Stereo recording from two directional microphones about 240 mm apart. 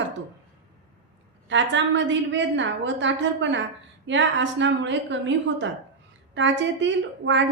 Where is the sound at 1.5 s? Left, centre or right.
Right.